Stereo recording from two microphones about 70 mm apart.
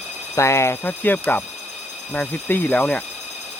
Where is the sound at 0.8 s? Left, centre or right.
Left.